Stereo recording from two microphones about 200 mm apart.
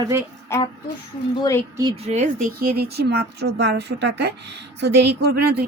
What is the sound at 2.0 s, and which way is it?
A woman's voice, 35° right (ahead or behind).